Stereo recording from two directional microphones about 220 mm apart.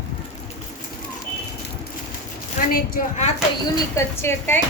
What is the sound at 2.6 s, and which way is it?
Speech, 40° left (ahead or behind).